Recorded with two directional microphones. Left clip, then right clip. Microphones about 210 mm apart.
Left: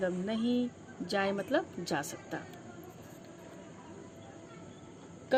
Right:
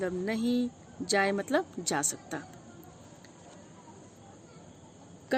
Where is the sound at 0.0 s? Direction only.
55° right (ahead or behind).